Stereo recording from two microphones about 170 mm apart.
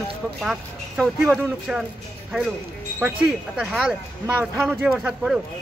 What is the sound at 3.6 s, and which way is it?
Speech, centre (ahead or behind).